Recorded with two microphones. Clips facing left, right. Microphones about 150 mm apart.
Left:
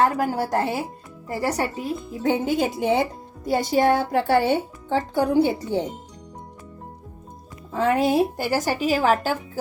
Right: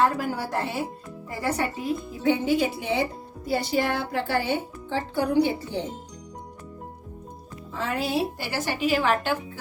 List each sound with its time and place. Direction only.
0.0 s speech: 45° left (ahead or behind)
7.7 s speech: 50° left (ahead or behind)